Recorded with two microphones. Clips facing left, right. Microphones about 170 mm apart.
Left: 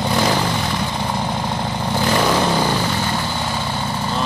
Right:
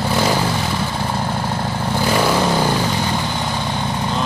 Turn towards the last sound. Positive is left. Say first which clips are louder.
# right 1 dB
turn(degrees=-15)  # may be behind; listen again after turning